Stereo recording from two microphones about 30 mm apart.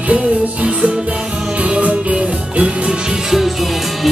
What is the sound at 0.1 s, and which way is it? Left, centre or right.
Music, right.